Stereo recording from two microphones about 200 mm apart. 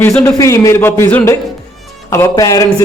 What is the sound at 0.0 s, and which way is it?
A man's voice, 10° left (ahead or behind).